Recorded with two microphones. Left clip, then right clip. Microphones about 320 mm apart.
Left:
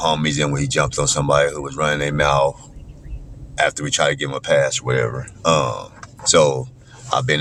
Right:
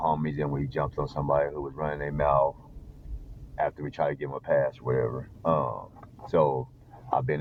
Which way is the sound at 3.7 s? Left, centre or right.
Right.